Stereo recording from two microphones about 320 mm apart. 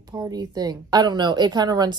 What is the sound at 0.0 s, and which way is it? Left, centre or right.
A woman's voice, centre.